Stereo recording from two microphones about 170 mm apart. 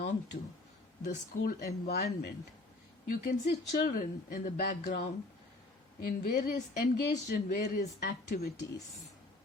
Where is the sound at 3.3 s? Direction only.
55° left (ahead or behind).